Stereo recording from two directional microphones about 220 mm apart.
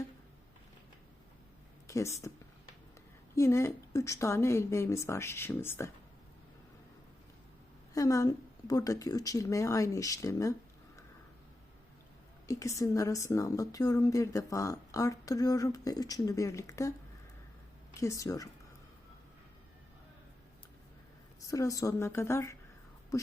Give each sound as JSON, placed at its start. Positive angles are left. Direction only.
{"t": 1.9, "sound": "speech", "side_deg": 15}
{"t": 3.3, "sound": "a woman's voice", "side_deg": 10}
{"t": 7.9, "sound": "a woman's voice", "side_deg": 15}
{"t": 12.5, "sound": "a woman's voice", "side_deg": 15}
{"t": 18.0, "sound": "a woman's voice", "side_deg": 15}
{"t": 21.4, "sound": "a woman's voice", "side_deg": 15}
{"t": 23.1, "sound": "a sound", "side_deg": 15}